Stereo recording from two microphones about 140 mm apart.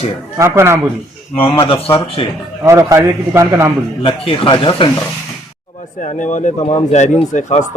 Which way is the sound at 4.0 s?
40° left (ahead or behind).